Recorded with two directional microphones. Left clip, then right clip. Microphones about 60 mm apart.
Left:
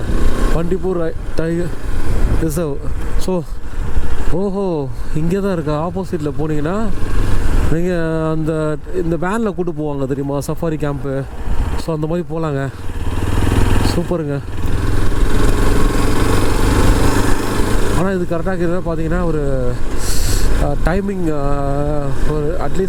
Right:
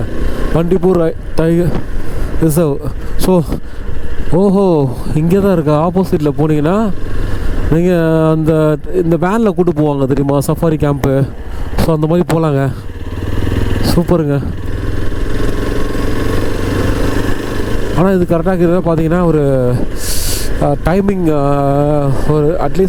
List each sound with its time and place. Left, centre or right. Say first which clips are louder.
0.1 s vehicle: even; left
0.5 s speech: right 9 dB; right
3.2 s speech: right 9 dB; right
9.5 s speech: right 8 dB; right
11.9 s speech: right 8 dB; right
13.1 s vehicle: even; left
13.9 s speech: right 6 dB; right
14.8 s vehicle: left 1 dB; left
18.0 s speech: right 12 dB; right
19.2 s a sound: right 7 dB; right
20.7 s speech: right 7 dB; right